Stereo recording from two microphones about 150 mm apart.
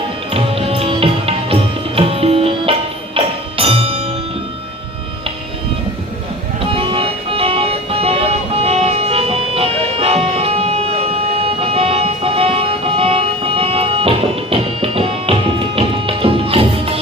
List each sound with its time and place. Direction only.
0.3 s music: 40° right (ahead or behind)
6.7 s music: 40° right (ahead or behind)